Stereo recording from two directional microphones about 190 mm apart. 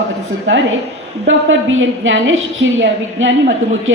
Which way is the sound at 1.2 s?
90° right.